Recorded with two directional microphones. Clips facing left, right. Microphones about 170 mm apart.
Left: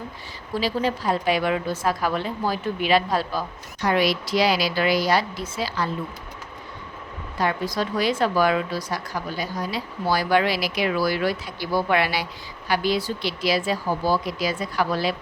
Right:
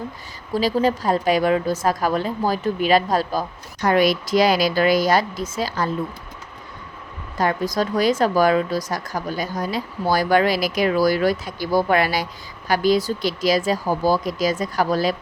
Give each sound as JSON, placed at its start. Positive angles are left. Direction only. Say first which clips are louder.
{"t": 0.5, "sound": "a woman's voice", "louder": "right 5 dB", "side_deg": -40}
{"t": 7.3, "sound": "a woman's voice", "louder": "right 3 dB", "side_deg": -45}